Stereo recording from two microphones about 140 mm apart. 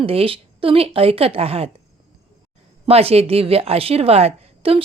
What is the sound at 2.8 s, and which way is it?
A woman's voice, 45° right (ahead or behind).